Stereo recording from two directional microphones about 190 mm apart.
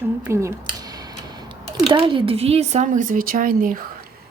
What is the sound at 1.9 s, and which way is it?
Speech, 25° right (ahead or behind).